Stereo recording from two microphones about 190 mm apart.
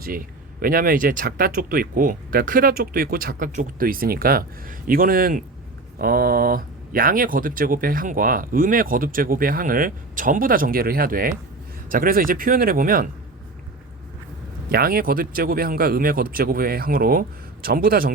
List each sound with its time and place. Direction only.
0.0 s speech: 50° right (ahead or behind)
14.7 s speech: 50° right (ahead or behind)